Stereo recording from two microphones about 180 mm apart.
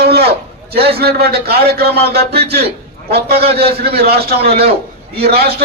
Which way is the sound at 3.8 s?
60° right (ahead or behind).